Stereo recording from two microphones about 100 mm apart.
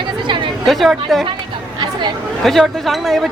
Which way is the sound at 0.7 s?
Centre (ahead or behind).